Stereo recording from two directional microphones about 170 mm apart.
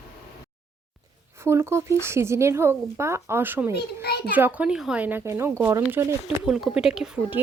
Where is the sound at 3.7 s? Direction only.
70° left (ahead or behind).